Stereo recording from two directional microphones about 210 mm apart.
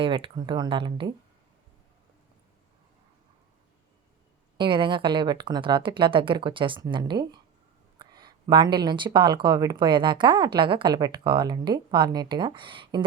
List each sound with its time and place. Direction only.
0.0 s speech: 25° right (ahead or behind)
4.5 s speech: 20° right (ahead or behind)